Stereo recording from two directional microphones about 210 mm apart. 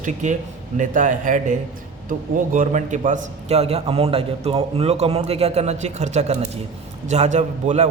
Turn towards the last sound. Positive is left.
turn(degrees=-30)  # may be behind; listen again after turning